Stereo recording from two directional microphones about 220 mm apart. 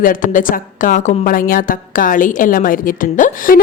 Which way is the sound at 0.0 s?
40° left (ahead or behind).